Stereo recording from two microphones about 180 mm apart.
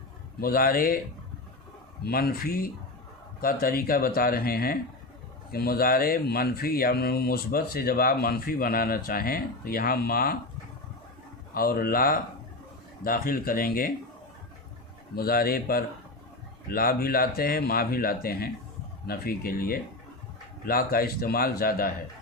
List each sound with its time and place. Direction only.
0.3 s speech: 55° left (ahead or behind)
2.0 s speech: 55° left (ahead or behind)
11.5 s speech: 55° left (ahead or behind)
15.1 s speech: 55° left (ahead or behind)